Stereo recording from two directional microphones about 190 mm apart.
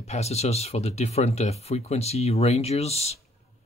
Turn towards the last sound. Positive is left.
turn(degrees=35)  # may be behind; listen again after turning